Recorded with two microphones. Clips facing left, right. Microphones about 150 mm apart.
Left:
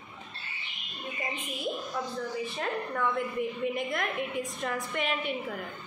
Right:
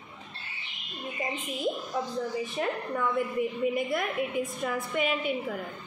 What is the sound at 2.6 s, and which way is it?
A woman's voice, 10° right (ahead or behind).